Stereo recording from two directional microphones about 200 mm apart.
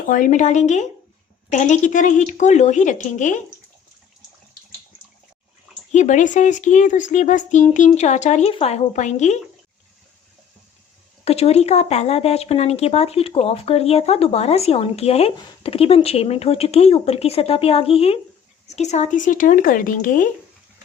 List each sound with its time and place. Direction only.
0.0 s speech: 40° left (ahead or behind)
5.9 s speech: 35° left (ahead or behind)
11.3 s speech: 30° left (ahead or behind)